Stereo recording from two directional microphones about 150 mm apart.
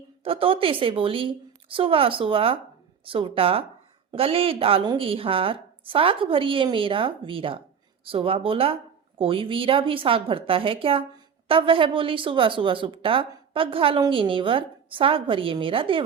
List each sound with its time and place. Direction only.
0.3 s speech: 35° right (ahead or behind)